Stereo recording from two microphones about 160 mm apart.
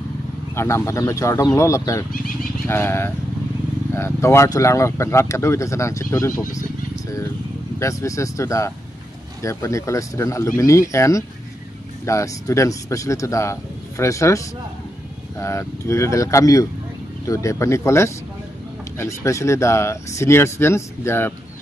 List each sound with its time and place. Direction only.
0.6 s a man's voice: 15° left (ahead or behind)
7.8 s a man's voice: 20° left (ahead or behind)